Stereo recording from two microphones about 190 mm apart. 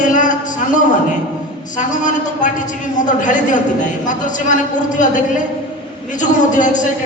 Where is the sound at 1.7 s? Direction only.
40° left (ahead or behind).